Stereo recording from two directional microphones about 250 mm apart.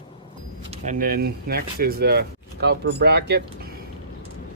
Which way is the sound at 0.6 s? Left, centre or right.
Right.